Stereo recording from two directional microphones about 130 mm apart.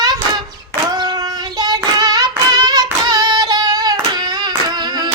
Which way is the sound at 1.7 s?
35° right (ahead or behind).